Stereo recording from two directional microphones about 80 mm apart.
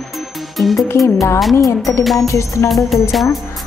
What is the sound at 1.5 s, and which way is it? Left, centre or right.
Music, left.